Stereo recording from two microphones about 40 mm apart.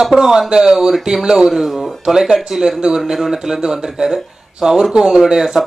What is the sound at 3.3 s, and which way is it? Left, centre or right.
Speech, centre.